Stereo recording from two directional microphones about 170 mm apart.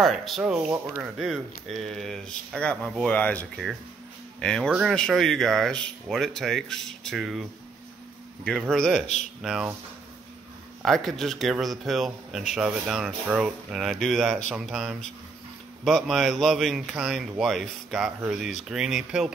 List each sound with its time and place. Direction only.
0.0 s speech: centre (ahead or behind)
8.5 s speech: 5° left (ahead or behind)
9.0 s speech: 40° left (ahead or behind)
9.4 s speech: 5° right (ahead or behind)
10.8 s speech: centre (ahead or behind)